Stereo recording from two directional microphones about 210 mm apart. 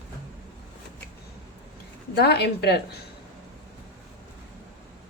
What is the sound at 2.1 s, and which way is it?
Speech, 50° left (ahead or behind).